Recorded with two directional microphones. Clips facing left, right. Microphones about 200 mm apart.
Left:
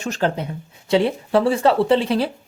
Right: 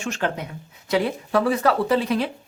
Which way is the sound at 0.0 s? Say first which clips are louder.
Left 4 dB; 35° left (ahead or behind).